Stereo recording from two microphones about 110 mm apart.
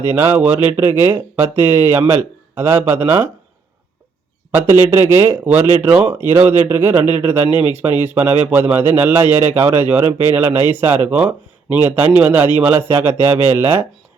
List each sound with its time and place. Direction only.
0.1 s speech: 20° right (ahead or behind)
4.5 s speech: 20° right (ahead or behind)